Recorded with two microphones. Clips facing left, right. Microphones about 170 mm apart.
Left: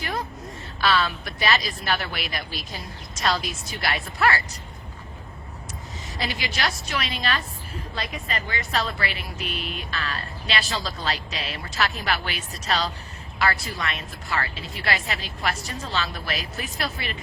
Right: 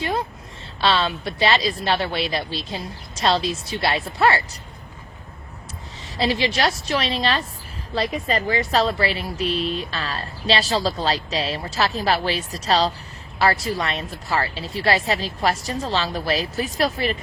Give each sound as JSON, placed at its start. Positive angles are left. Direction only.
{"t": 0.0, "sound": "a sound", "side_deg": -25}
{"t": 0.8, "sound": "speech", "side_deg": -25}
{"t": 6.1, "sound": "a woman's voice", "side_deg": -30}